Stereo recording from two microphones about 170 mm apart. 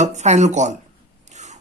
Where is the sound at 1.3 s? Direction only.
45° right (ahead or behind).